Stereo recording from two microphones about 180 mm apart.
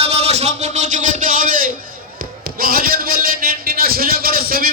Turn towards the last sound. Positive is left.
turn(degrees=-55)  # may be behind; listen again after turning